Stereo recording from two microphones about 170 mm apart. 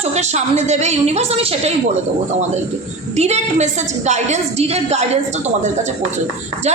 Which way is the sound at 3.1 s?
40° right (ahead or behind).